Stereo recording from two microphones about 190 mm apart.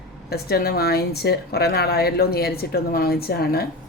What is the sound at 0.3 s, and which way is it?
A woman's voice, 55° left (ahead or behind).